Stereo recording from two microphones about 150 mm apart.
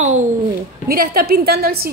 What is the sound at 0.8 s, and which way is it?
A woman's voice, 85° right.